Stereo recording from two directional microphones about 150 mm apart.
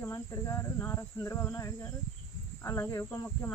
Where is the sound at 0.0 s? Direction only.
20° left (ahead or behind).